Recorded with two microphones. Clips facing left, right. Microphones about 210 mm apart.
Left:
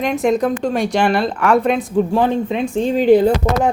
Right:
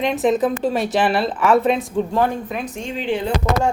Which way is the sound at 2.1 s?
20° left (ahead or behind).